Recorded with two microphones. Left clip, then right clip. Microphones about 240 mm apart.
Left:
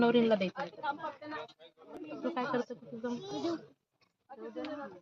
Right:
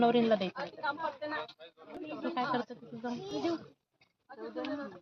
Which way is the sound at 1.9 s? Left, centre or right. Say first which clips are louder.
Right 1 dB; left.